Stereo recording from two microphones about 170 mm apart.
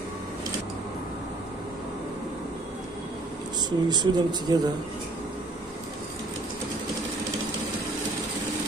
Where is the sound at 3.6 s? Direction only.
25° right (ahead or behind).